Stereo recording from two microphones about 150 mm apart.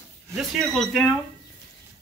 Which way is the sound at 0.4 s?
Centre (ahead or behind).